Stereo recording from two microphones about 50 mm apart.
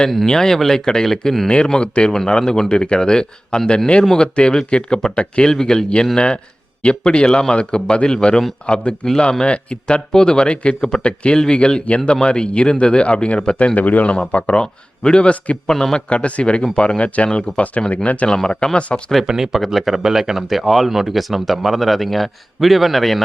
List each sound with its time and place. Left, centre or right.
0.3 s speech: centre
13.7 s speech: left
15.6 s speech: centre
16.0 s speech: left
18.3 s speech: centre
19.2 s speech: centre
19.5 s speech: centre